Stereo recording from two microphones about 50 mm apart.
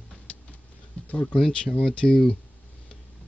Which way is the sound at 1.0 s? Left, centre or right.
Left.